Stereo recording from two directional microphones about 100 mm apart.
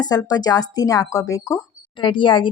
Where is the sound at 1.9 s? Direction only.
55° left (ahead or behind).